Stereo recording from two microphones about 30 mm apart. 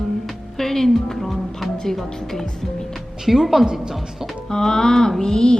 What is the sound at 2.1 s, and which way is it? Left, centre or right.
Speech, centre.